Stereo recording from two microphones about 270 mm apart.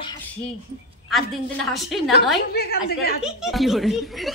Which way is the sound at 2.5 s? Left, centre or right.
Left.